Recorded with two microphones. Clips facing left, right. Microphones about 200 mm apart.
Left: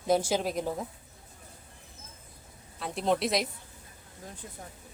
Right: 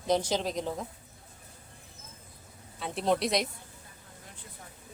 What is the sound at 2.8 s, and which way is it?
Speech, centre (ahead or behind).